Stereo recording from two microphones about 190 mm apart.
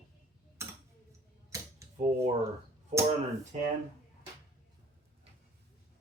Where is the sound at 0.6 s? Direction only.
15° right (ahead or behind).